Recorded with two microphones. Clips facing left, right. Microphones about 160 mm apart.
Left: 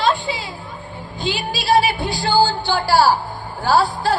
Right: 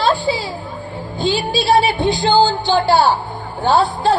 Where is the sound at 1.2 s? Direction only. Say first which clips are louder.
Right 6 dB; 30° right (ahead or behind).